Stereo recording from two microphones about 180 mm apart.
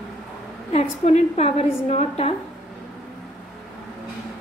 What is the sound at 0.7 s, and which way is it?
A woman's voice, 35° left (ahead or behind).